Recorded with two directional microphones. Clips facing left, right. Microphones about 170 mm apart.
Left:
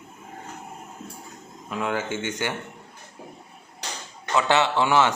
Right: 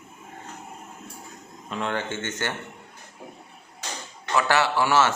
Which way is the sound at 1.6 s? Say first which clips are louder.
Left 1 dB; 5° left (ahead or behind).